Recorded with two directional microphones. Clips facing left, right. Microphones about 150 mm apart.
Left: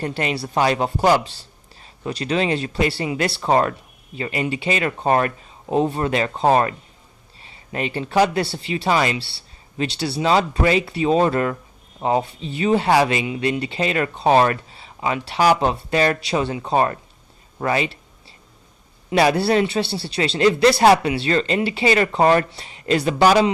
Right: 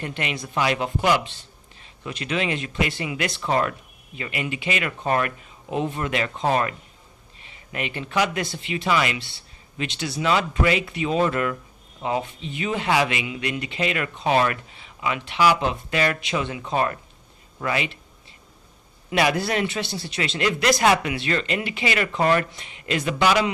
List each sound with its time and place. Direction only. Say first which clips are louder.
0.0 s speech: left 6 dB; 35° left (ahead or behind)
19.1 s speech: left 5 dB; 30° left (ahead or behind)